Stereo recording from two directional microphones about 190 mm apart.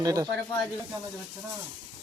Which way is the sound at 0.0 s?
20° right (ahead or behind).